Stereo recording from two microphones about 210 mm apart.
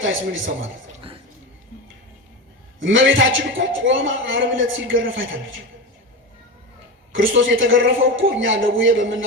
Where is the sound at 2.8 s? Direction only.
65° right (ahead or behind).